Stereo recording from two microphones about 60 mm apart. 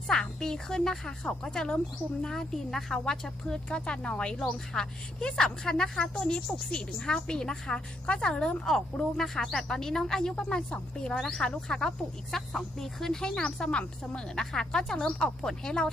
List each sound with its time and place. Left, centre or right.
0.1 s a woman's voice: centre